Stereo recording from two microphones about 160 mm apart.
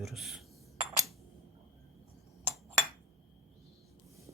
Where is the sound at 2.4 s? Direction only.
15° right (ahead or behind).